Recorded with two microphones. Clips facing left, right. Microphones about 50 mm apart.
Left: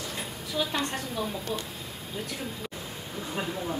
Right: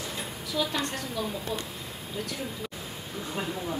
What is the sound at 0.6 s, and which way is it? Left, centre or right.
Speech, centre.